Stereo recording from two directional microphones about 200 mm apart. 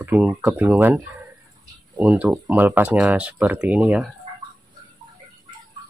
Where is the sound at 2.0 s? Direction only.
10° right (ahead or behind).